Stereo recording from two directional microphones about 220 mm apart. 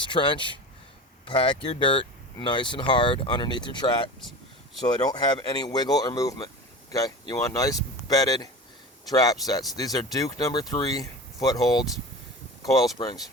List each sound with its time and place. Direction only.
0.0 s speech: 20° left (ahead or behind)
5.0 s speech: 20° left (ahead or behind)